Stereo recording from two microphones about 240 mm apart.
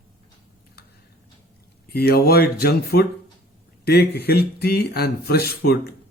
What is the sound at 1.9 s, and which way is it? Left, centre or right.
Speech, left.